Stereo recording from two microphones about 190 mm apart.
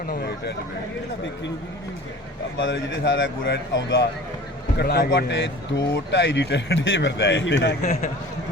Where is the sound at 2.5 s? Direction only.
70° left (ahead or behind).